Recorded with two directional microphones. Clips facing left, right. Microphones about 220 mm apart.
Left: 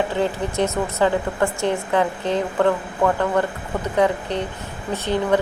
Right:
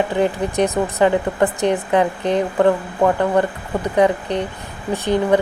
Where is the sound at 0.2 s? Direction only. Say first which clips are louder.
Right 3 dB; 15° right (ahead or behind).